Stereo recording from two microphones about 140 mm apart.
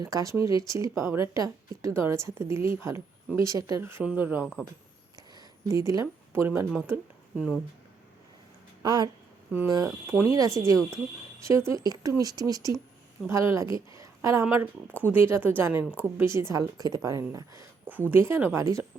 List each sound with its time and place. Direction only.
0.0 s a woman's voice: 25° right (ahead or behind)
5.6 s speech: 20° right (ahead or behind)
8.8 s a woman's voice: 30° right (ahead or behind)